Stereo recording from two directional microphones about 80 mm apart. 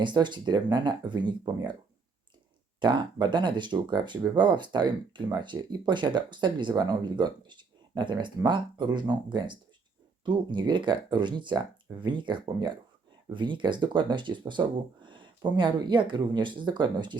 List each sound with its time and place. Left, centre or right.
0.0 s speech: right
2.8 s speech: right
10.2 s speech: right